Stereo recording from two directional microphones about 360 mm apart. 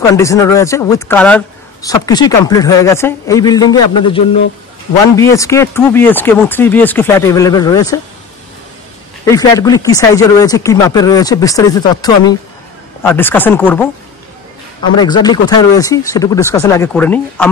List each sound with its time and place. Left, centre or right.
0.1 s a man's voice: centre
9.2 s a man's voice: centre
15.0 s a man's voice: centre